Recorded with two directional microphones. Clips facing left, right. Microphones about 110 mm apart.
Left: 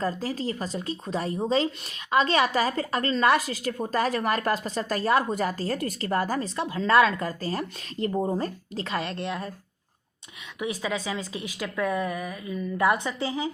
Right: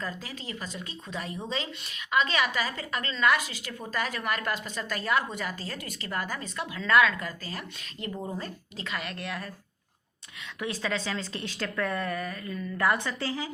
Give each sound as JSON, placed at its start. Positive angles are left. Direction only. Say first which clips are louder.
{"t": 0.0, "sound": "speech", "louder": "left 9 dB", "side_deg": 35}
{"t": 10.6, "sound": "a woman's voice", "louder": "left 2 dB", "side_deg": 15}